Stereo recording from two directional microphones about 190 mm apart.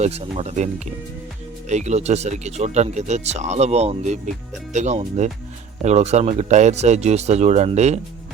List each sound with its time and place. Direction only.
0.0 s speech: 30° right (ahead or behind)